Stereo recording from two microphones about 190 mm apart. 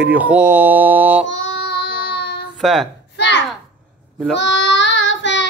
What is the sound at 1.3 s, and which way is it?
Child singing, 80° left.